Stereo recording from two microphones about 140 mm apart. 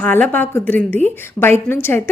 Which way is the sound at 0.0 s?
10° left (ahead or behind).